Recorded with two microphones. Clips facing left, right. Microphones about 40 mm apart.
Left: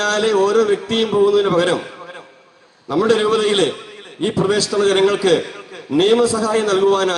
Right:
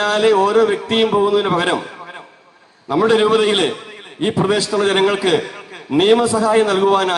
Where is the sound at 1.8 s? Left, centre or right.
Centre.